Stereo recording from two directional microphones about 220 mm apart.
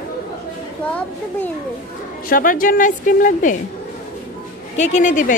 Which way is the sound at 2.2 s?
40° left (ahead or behind).